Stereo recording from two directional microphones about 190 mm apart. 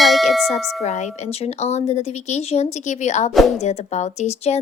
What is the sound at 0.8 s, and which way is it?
Speech, 35° left (ahead or behind).